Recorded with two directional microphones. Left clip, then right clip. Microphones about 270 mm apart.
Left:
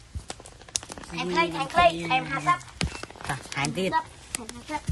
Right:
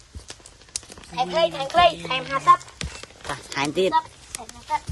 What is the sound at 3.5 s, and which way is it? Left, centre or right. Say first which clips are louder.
Speech: right 6 dB; right.